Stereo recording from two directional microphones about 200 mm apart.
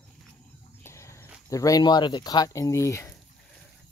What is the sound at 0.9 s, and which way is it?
Speech, 15° left (ahead or behind).